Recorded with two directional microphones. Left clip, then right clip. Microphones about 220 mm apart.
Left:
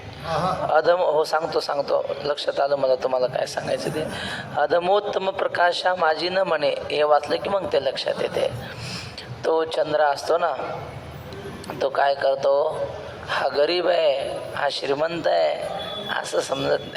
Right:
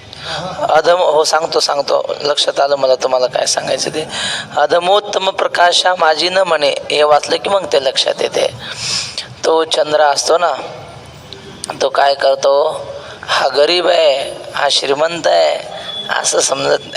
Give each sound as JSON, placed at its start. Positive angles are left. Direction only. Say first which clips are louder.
{"t": 0.3, "sound": "a man's voice", "louder": "right 6 dB", "side_deg": -50}
{"t": 11.7, "sound": "a man's voice", "louder": "right 9 dB", "side_deg": -50}